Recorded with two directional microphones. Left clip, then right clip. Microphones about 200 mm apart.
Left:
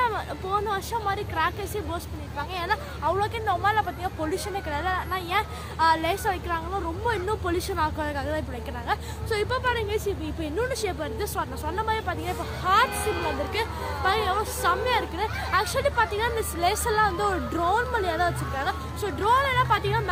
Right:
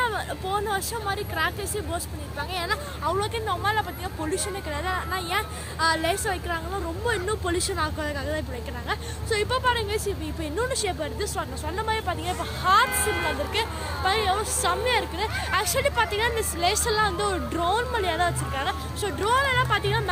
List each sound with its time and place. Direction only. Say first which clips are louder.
0.0 s speech: even; 10° left (ahead or behind)